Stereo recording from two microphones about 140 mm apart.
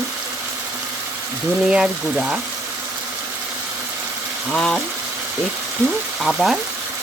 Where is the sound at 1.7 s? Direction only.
5° right (ahead or behind).